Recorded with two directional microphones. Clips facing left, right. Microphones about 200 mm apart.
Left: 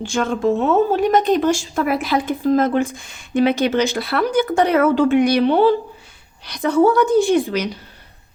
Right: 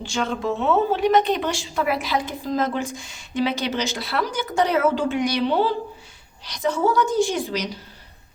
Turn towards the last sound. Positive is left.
turn(degrees=60)  # may be behind; listen again after turning